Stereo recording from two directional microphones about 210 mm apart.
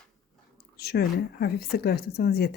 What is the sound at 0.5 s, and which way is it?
Speech, 50° left (ahead or behind).